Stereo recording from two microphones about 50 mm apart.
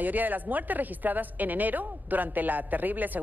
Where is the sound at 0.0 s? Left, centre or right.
Right.